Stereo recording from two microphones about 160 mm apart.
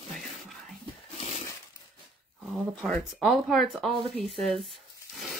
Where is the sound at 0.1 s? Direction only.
Centre (ahead or behind).